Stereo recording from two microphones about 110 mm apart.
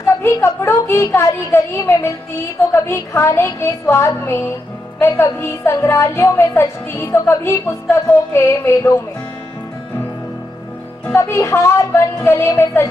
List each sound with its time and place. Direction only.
0.2 s speech: 20° left (ahead or behind)
11.1 s speech: 25° left (ahead or behind)